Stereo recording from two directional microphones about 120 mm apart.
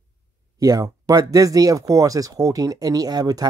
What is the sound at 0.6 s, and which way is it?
Speech, 30° right (ahead or behind).